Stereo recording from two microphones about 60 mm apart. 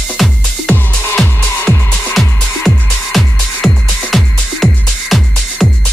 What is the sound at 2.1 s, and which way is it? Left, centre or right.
Music, centre.